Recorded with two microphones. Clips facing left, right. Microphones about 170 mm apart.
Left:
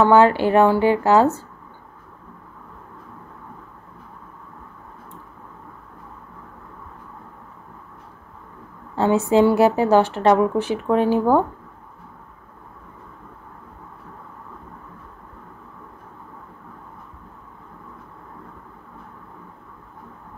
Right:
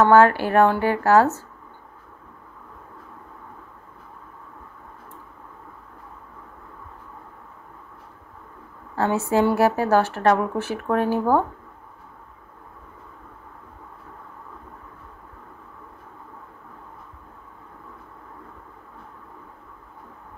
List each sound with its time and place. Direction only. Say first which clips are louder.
0.0 s a woman's voice: left 1 dB; 15° left (ahead or behind)
8.9 s a woman's voice: left 4 dB; 20° left (ahead or behind)